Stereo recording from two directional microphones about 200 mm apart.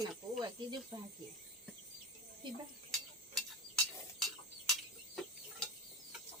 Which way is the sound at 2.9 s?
Centre (ahead or behind).